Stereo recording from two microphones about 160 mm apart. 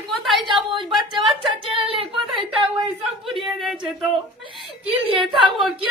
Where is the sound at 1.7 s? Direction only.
35° right (ahead or behind).